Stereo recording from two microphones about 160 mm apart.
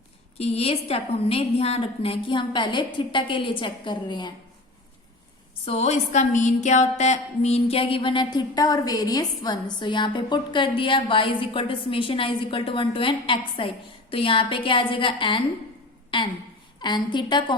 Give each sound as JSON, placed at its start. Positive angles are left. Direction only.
{"t": 0.3, "sound": "music", "side_deg": 40}
{"t": 5.6, "sound": "music", "side_deg": 40}
{"t": 16.8, "sound": "a woman's voice", "side_deg": 30}